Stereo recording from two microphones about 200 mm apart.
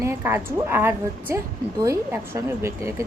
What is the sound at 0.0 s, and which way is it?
A woman's voice, 15° right (ahead or behind).